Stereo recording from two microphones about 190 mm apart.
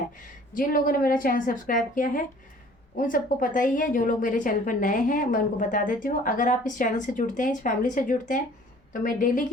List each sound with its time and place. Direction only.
0.5 s a woman's voice: 45° left (ahead or behind)